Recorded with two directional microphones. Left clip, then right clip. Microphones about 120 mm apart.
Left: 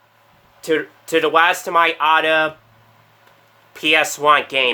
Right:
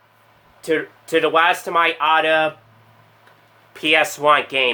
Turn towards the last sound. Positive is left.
turn(degrees=20)  # may be behind; listen again after turning